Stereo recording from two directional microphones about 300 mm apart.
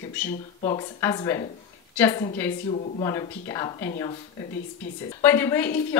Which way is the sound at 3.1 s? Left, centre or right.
Centre.